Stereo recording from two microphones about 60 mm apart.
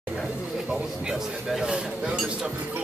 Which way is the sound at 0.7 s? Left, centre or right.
Centre.